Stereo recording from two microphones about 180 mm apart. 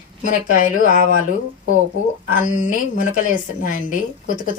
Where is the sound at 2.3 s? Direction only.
45° left (ahead or behind).